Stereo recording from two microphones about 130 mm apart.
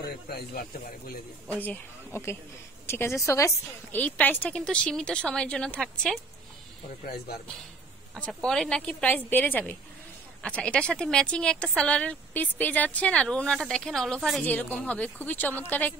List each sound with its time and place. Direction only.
1.5 s a woman's voice: 15° left (ahead or behind)
3.9 s speech: 15° left (ahead or behind)
8.1 s speech: 5° left (ahead or behind)
14.4 s speech: 15° left (ahead or behind)